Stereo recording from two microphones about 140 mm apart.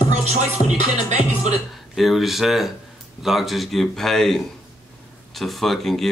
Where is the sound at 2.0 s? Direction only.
Centre (ahead or behind).